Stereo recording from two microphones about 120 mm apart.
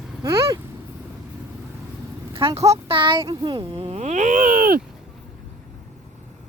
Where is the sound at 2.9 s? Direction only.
45° right (ahead or behind).